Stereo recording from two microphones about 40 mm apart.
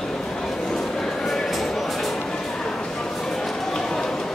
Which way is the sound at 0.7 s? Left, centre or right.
Centre.